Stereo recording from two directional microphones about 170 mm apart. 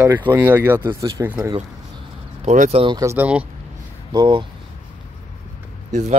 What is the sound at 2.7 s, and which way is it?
Speech, 30° right (ahead or behind).